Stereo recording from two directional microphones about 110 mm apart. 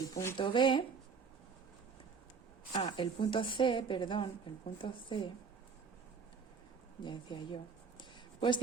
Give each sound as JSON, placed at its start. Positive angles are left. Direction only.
{"t": 0.1, "sound": "speech", "side_deg": 25}
{"t": 0.3, "sound": "a woman's voice", "side_deg": 50}
{"t": 2.7, "sound": "a woman's voice", "side_deg": 45}
{"t": 7.0, "sound": "a sound", "side_deg": 45}